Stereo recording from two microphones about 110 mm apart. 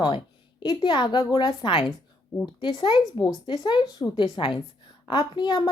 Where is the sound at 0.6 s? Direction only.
45° left (ahead or behind).